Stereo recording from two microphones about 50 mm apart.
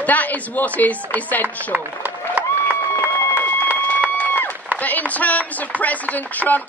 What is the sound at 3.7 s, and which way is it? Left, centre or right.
Run, left.